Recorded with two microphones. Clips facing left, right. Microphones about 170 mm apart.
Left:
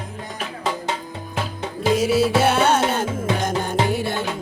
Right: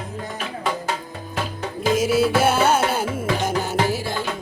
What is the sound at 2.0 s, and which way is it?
Music, centre (ahead or behind).